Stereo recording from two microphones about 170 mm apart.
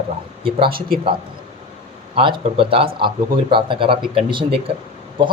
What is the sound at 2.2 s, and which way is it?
Speech, 30° right (ahead or behind).